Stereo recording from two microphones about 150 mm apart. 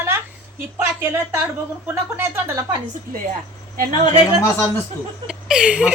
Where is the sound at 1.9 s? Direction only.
15° right (ahead or behind).